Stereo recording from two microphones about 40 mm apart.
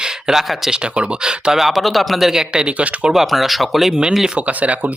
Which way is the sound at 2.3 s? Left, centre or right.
Centre.